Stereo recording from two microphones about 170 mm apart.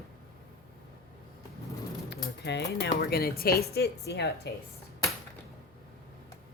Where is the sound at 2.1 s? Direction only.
85° left.